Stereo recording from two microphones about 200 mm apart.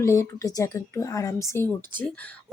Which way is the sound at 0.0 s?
15° left (ahead or behind).